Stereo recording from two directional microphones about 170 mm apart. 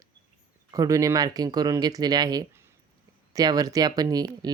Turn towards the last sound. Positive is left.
turn(degrees=-25)  # may be behind; listen again after turning